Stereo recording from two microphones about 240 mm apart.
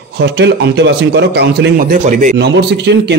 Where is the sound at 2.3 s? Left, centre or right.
Right.